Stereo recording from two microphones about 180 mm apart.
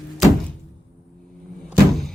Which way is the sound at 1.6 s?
Centre (ahead or behind).